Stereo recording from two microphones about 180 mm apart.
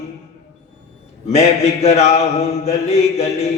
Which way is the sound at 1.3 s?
35° left (ahead or behind).